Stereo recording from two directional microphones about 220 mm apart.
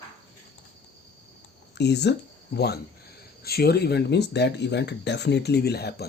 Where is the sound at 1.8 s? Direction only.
50° left (ahead or behind).